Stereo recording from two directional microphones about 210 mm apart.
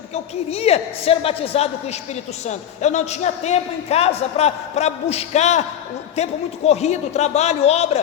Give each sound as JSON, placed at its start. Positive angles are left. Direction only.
{"t": 0.1, "sound": "a woman's voice", "side_deg": 30}